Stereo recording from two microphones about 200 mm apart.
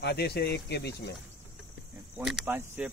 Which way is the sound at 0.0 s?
55° left (ahead or behind).